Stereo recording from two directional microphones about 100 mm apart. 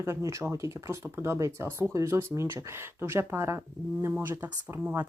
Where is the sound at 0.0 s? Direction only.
30° right (ahead or behind).